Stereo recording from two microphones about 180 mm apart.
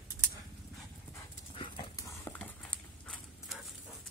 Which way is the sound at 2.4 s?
5° left (ahead or behind).